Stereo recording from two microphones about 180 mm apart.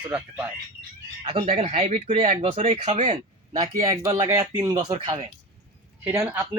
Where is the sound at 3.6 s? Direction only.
20° right (ahead or behind).